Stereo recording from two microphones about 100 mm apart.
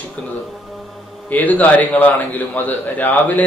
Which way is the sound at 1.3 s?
15° left (ahead or behind).